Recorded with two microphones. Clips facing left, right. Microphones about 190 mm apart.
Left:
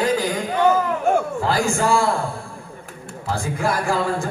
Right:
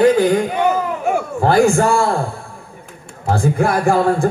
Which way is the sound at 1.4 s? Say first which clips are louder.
Right 8 dB; 55° right (ahead or behind).